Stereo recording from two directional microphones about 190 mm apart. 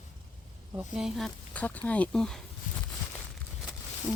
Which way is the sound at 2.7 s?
45° left (ahead or behind).